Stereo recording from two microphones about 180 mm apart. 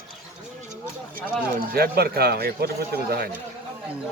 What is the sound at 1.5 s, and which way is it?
Speech, 60° right (ahead or behind).